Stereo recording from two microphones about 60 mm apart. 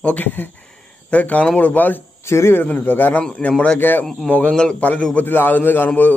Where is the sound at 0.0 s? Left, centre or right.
Left.